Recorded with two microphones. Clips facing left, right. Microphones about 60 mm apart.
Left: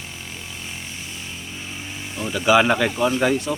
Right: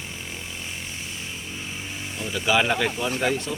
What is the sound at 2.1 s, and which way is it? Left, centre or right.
Speech, centre.